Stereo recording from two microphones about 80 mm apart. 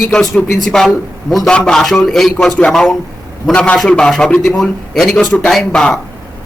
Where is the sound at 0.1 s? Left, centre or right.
Centre.